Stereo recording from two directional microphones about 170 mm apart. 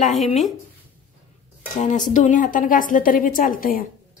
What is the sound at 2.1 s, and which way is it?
A woman's voice, 50° left (ahead or behind).